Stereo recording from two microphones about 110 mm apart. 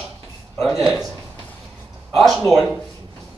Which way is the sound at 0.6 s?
Centre (ahead or behind).